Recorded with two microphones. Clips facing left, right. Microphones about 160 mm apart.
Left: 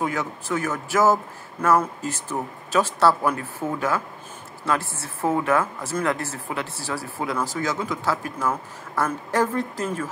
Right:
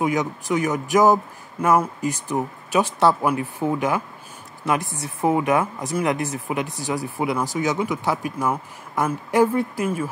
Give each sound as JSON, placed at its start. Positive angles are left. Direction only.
{"t": 0.0, "sound": "speech", "side_deg": -15}